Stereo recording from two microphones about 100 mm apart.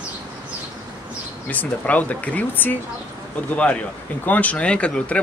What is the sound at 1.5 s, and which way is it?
Speech, 15° left (ahead or behind).